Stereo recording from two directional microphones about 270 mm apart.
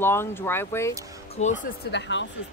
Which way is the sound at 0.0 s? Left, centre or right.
Centre.